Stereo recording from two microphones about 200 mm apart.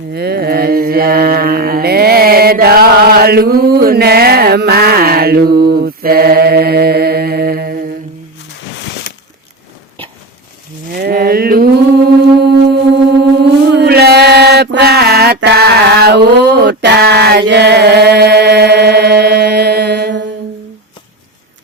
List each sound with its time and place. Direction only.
0.1 s mantra: 55° right (ahead or behind)
10.9 s a sound: 50° right (ahead or behind)
13.4 s mantra: 55° right (ahead or behind)